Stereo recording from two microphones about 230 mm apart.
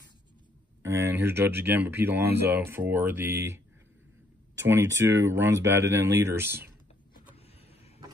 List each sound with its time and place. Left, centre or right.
0.8 s speech: centre
4.6 s speech: centre